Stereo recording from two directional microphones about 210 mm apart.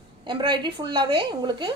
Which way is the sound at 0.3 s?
20° right (ahead or behind).